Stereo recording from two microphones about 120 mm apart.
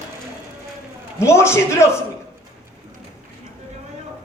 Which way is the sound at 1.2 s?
25° left (ahead or behind).